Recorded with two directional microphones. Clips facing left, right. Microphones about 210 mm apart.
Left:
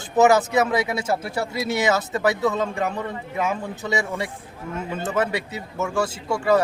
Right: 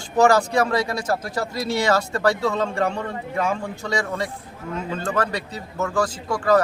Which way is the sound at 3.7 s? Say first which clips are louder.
Left 1 dB; 20° left (ahead or behind).